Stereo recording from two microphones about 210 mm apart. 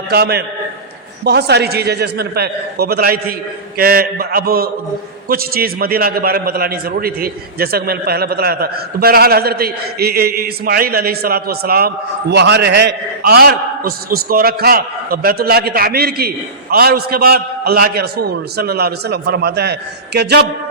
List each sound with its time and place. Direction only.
0.1 s a man's voice: 50° right (ahead or behind)